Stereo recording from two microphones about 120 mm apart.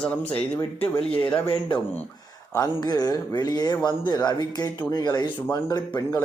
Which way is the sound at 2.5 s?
30° left (ahead or behind).